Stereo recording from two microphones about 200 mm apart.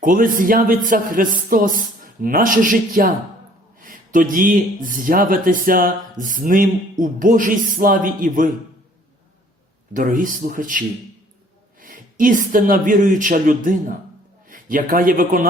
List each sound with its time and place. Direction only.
0.0 s speech: 45° right (ahead or behind)
9.9 s a man's voice: 40° right (ahead or behind)